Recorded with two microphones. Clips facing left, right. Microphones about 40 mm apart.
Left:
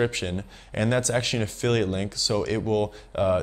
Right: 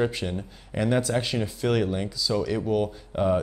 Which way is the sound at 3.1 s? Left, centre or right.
Left.